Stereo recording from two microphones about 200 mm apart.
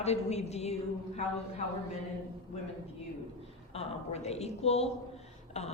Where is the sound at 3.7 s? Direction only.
30° left (ahead or behind).